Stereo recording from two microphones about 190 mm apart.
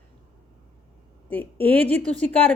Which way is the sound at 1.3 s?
10° left (ahead or behind).